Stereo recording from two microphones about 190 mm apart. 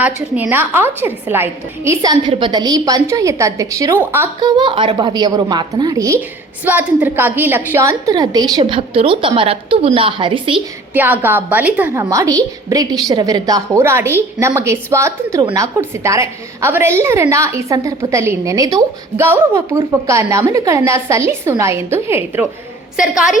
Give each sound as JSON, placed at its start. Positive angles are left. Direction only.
{"t": 0.0, "sound": "a woman's voice", "side_deg": -10}
{"t": 4.4, "sound": "a woman's voice", "side_deg": -25}
{"t": 10.9, "sound": "a woman's voice", "side_deg": -10}